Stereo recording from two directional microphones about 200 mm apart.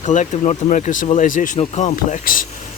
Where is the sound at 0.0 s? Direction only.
35° left (ahead or behind).